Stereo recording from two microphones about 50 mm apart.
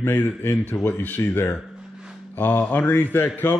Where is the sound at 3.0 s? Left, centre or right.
Left.